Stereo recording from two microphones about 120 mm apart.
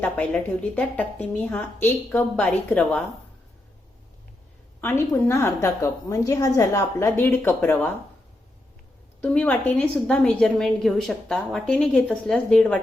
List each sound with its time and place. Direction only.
0.0 s a woman's voice: 10° left (ahead or behind)
4.8 s a woman's voice: 20° left (ahead or behind)
9.2 s a woman's voice: 10° left (ahead or behind)